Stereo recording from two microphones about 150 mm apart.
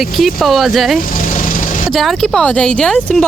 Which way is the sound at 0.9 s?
60° left (ahead or behind).